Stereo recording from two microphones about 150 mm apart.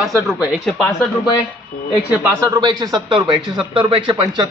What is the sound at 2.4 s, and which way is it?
A man's voice, 25° right (ahead or behind).